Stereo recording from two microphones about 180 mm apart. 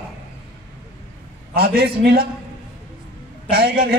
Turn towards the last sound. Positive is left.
turn(degrees=-60)  # may be behind; listen again after turning